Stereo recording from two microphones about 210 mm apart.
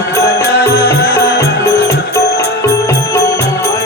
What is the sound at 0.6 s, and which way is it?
Music, 50° left (ahead or behind).